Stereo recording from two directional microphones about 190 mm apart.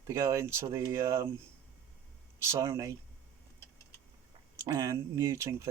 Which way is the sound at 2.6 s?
15° right (ahead or behind).